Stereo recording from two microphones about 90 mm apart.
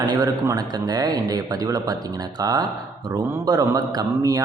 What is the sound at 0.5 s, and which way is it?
A man's voice, 45° right (ahead or behind).